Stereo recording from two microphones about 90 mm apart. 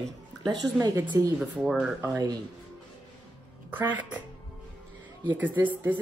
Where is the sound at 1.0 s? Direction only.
15° right (ahead or behind).